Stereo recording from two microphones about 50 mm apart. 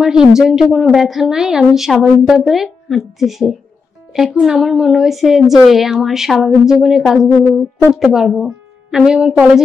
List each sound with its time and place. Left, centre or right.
0.0 s a woman's voice: centre
1.0 s a woman's voice: centre